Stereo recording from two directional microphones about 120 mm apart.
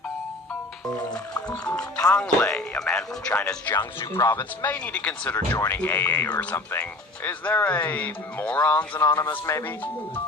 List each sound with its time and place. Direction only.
2.1 s speech: 5° left (ahead or behind)
4.1 s speech: 20° left (ahead or behind)